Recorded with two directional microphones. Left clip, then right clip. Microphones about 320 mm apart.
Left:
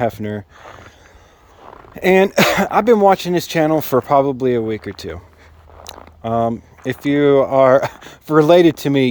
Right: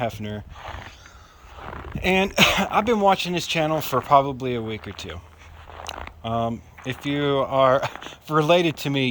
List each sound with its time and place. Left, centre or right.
0.0 s speech: left
2.0 s speech: centre
5.9 s a sound: left
6.2 s speech: centre